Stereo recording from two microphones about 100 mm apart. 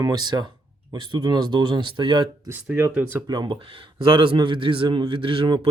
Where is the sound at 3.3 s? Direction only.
50° right (ahead or behind).